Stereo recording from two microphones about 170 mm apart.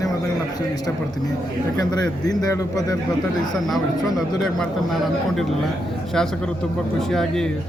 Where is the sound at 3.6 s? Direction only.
Centre (ahead or behind).